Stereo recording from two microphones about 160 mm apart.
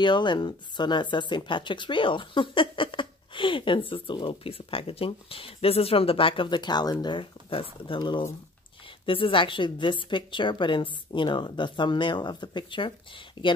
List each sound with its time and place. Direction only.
0.0 s speech: 30° left (ahead or behind)